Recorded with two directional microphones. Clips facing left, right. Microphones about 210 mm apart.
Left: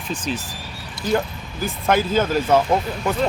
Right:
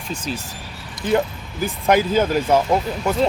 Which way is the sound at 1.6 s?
15° right (ahead or behind).